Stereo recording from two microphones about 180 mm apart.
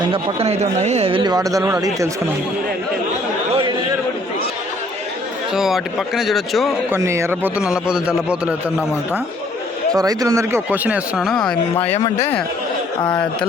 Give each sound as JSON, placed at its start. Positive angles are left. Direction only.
{"t": 0.1, "sound": "speech", "side_deg": -35}
{"t": 5.5, "sound": "speech", "side_deg": 0}
{"t": 6.9, "sound": "a man's voice", "side_deg": -15}
{"t": 9.9, "sound": "a man's voice", "side_deg": -20}
{"t": 12.0, "sound": "speech", "side_deg": 15}